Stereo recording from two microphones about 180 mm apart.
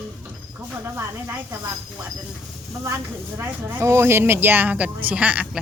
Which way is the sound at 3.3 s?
10° right (ahead or behind).